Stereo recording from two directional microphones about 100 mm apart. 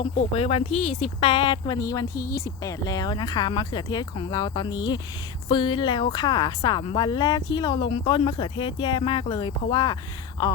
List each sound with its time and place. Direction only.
0.0 s speech: 75° left (ahead or behind); by 10.5 s 35° left (ahead or behind)